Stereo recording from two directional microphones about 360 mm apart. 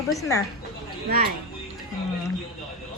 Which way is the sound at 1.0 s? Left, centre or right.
Right.